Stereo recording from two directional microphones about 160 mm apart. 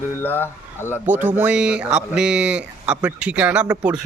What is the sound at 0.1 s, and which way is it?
Speech, 15° left (ahead or behind).